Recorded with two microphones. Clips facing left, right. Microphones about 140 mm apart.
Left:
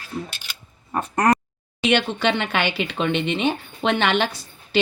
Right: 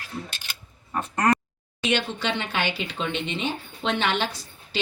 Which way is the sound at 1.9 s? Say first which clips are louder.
Left 5 dB; 65° left (ahead or behind).